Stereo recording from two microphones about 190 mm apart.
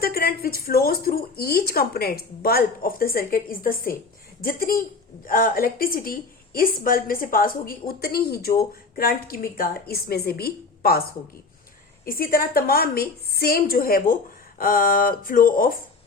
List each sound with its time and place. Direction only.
0.0 s a woman's voice: 55° left (ahead or behind)
12.0 s a woman's voice: 50° left (ahead or behind)